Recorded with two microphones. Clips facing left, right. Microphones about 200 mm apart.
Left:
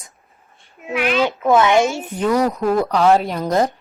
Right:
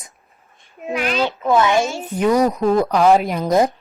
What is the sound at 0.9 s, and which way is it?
Speech, 40° right (ahead or behind).